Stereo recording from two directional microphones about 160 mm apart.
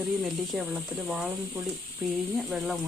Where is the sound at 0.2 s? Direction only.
5° right (ahead or behind).